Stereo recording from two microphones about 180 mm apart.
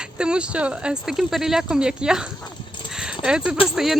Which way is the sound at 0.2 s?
5° right (ahead or behind).